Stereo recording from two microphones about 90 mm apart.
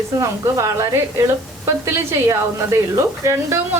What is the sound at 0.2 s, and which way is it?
A woman's voice, 35° right (ahead or behind).